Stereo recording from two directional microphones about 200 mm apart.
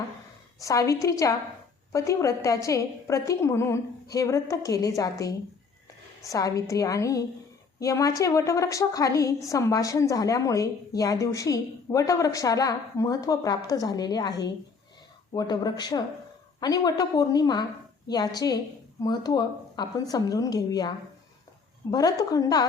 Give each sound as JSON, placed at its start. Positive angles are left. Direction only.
{"t": 0.6, "sound": "speech", "side_deg": 15}